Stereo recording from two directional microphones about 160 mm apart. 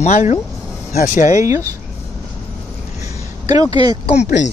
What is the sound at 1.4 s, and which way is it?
Speech, 20° right (ahead or behind).